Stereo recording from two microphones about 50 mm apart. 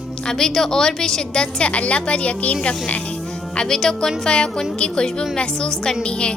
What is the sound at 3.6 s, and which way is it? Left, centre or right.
Speech, centre.